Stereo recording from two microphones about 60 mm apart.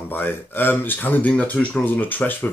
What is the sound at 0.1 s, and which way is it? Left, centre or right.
Speech, left.